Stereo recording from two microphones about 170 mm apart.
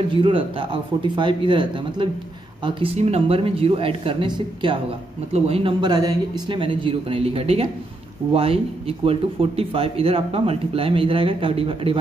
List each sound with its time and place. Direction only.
0.1 s speech: 30° right (ahead or behind)